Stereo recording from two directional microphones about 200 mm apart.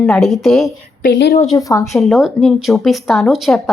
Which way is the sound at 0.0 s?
Centre (ahead or behind).